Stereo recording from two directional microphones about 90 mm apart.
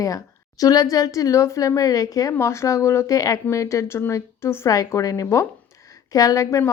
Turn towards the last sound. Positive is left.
turn(degrees=35)  # may be behind; listen again after turning